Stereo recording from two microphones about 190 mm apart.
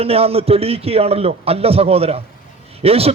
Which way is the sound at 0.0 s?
30° right (ahead or behind).